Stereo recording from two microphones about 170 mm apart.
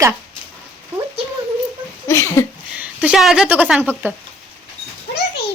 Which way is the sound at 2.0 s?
15° left (ahead or behind).